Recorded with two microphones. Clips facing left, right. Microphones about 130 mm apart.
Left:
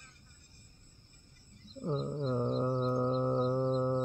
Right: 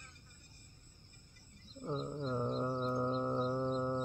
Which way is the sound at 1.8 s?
30° left (ahead or behind).